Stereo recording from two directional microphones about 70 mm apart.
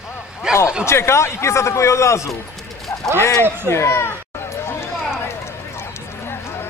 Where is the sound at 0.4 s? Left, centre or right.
Centre.